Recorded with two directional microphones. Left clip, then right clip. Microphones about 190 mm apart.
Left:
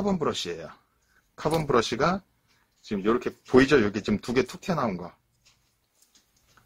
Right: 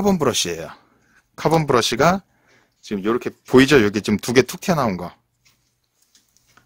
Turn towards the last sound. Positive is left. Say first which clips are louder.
# right 8 dB
turn(degrees=-60)  # may be behind; listen again after turning